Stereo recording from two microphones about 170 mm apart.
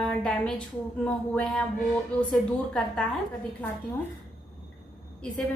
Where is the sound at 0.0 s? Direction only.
5° left (ahead or behind).